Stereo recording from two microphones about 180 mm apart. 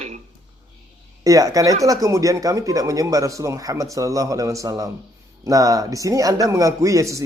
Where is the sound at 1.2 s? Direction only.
20° right (ahead or behind).